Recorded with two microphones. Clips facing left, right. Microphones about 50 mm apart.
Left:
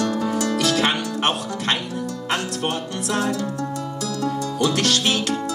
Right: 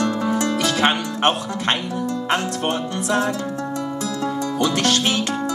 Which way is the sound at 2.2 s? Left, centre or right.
Right.